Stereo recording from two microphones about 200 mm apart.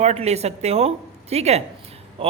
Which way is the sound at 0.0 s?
35° right (ahead or behind).